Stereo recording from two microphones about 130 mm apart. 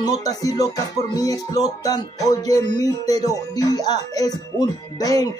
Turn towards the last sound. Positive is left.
turn(degrees=30)  # may be behind; listen again after turning